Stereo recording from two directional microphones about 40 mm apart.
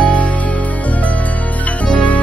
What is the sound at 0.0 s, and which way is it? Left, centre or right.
Music, left.